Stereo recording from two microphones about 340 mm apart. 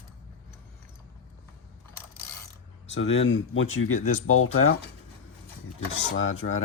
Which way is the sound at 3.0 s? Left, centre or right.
Left.